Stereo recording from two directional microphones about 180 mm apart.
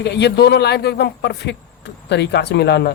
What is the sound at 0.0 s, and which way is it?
Speech, 70° left (ahead or behind).